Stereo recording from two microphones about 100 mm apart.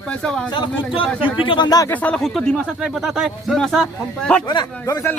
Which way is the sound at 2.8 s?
5° right (ahead or behind).